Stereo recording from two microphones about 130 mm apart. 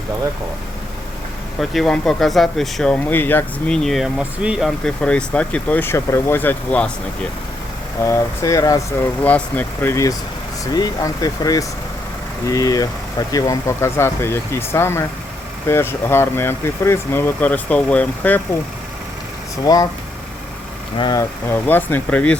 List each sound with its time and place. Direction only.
1.5 s speech: centre (ahead or behind)
3.8 s speech: centre (ahead or behind)
4.9 s speech: 10° left (ahead or behind)
8.0 s speech: 20° left (ahead or behind)
9.2 s speech: 10° left (ahead or behind)
19.6 s speech: 30° left (ahead or behind)
21.0 s speech: 30° left (ahead or behind)
21.5 s speech: 15° left (ahead or behind)